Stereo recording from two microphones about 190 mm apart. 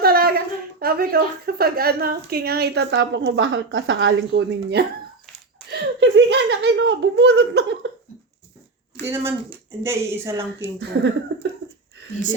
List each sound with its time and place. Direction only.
0.0 s speech: 55° right (ahead or behind)
9.0 s a woman's voice: 15° right (ahead or behind)
11.3 s a sound: 65° right (ahead or behind)